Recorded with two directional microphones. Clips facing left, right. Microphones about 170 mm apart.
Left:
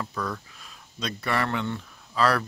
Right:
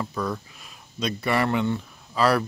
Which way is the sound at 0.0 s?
10° right (ahead or behind).